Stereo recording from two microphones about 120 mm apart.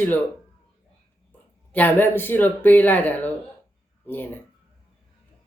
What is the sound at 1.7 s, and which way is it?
Speech, 15° left (ahead or behind).